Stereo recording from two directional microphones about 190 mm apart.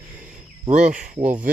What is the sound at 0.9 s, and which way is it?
Speech, 40° right (ahead or behind).